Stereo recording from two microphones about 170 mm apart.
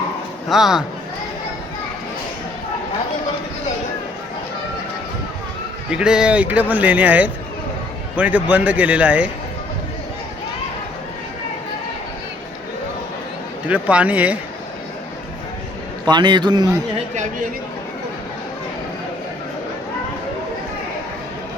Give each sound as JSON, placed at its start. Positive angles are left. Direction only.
{"t": 0.4, "sound": "speech", "side_deg": 0}
{"t": 5.9, "sound": "speech", "side_deg": -5}
{"t": 13.7, "sound": "speech", "side_deg": -10}
{"t": 16.0, "sound": "a man's voice", "side_deg": -25}